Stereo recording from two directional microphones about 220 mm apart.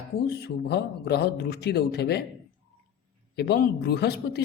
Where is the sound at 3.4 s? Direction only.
45° left (ahead or behind).